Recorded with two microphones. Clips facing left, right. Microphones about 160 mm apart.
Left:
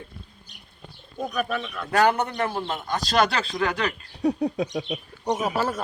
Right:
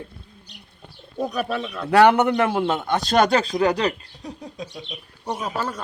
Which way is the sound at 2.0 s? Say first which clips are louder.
Right 6 dB; 85° right.